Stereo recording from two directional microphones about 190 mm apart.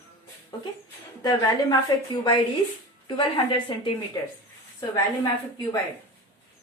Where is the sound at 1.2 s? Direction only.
20° left (ahead or behind).